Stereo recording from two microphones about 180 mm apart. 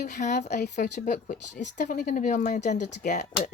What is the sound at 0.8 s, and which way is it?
Speech, 45° left (ahead or behind).